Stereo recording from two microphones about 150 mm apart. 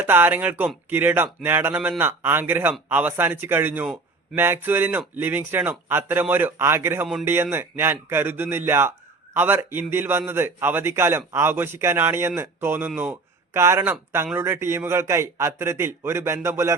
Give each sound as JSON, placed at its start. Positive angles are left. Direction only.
{"t": 0.0, "sound": "a man's voice", "side_deg": -15}